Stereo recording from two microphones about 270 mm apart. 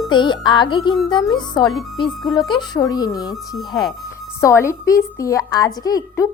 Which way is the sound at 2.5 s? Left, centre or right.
Centre.